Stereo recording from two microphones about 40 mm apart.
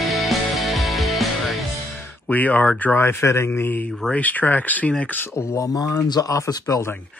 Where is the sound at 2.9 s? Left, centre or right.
Left.